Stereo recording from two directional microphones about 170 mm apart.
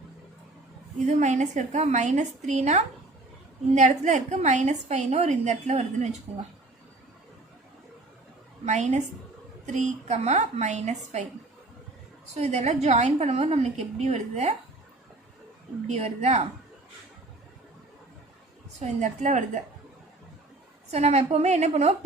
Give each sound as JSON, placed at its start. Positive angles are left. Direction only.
{"t": 0.9, "sound": "a woman's voice", "side_deg": -45}
{"t": 8.6, "sound": "a woman's voice", "side_deg": -40}
{"t": 12.3, "sound": "a woman's voice", "side_deg": -40}
{"t": 15.9, "sound": "a woman's voice", "side_deg": -40}
{"t": 18.8, "sound": "a woman's voice", "side_deg": -45}
{"t": 20.9, "sound": "a woman's voice", "side_deg": -40}